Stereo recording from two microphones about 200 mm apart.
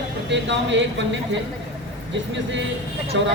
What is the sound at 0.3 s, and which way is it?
Speech, 65° right (ahead or behind).